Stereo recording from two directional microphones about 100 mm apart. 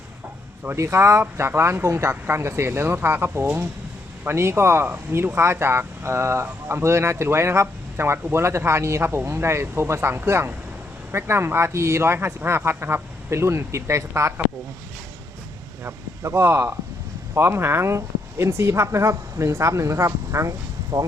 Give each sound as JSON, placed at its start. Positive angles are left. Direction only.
{"t": 0.6, "sound": "speech", "side_deg": -25}
{"t": 15.8, "sound": "speech", "side_deg": -25}